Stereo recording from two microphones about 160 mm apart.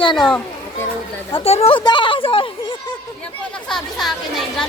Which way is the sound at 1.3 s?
40° left (ahead or behind).